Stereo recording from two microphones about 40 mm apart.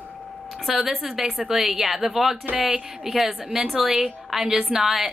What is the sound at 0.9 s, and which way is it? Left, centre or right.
A woman's voice, centre.